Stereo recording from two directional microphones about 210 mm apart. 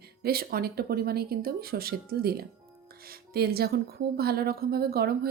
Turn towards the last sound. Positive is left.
turn(degrees=-45)  # may be behind; listen again after turning